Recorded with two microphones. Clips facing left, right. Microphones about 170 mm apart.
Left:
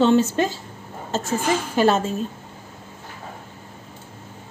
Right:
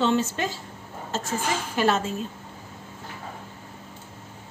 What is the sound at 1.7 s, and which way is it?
Speech, 35° left (ahead or behind).